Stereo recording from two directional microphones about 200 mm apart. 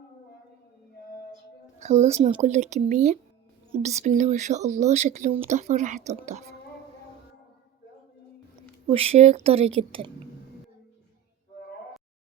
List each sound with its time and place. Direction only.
1.8 s speech: 35° right (ahead or behind)
8.9 s speech: 30° right (ahead or behind)